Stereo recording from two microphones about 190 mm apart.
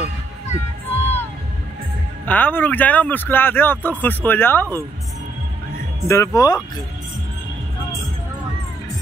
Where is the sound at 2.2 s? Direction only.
10° left (ahead or behind).